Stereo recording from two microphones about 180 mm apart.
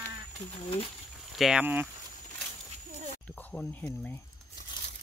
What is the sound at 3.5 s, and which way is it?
Speech, 10° left (ahead or behind).